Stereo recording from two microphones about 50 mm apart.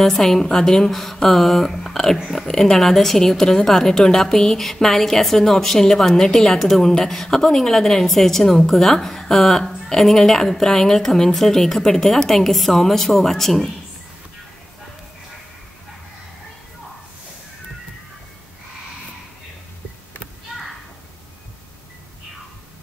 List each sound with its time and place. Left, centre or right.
0.0 s a woman's voice: centre
2.1 s a woman's voice: centre
2.4 s a woman's voice: centre